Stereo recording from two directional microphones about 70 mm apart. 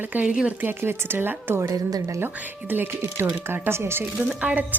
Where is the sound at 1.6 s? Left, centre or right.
Right.